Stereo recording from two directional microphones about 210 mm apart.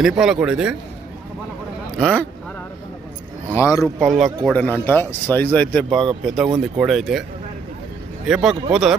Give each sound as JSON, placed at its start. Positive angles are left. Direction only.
{"t": 0.0, "sound": "a man's voice", "side_deg": -5}
{"t": 2.0, "sound": "a man's voice", "side_deg": 5}
{"t": 3.5, "sound": "speech", "side_deg": 15}
{"t": 4.0, "sound": "a man's voice", "side_deg": 0}
{"t": 8.3, "sound": "a man's voice", "side_deg": -5}